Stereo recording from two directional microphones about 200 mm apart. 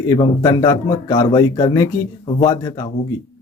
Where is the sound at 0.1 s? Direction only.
20° left (ahead or behind).